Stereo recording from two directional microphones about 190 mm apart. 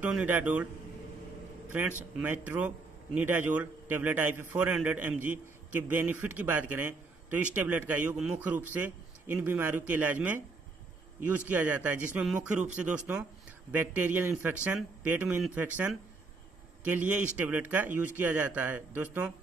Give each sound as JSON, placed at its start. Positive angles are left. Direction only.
{"t": 0.0, "sound": "a man's voice", "side_deg": -10}
{"t": 2.1, "sound": "a man's voice", "side_deg": -10}